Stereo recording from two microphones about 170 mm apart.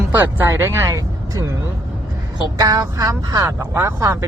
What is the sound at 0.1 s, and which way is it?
Speech, 10° right (ahead or behind).